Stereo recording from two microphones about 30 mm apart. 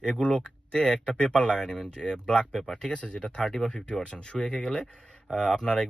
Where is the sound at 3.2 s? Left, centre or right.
Left.